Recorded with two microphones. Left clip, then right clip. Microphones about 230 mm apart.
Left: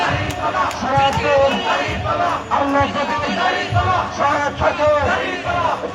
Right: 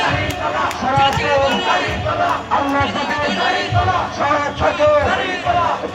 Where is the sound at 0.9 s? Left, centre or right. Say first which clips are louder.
Left 1 dB; right.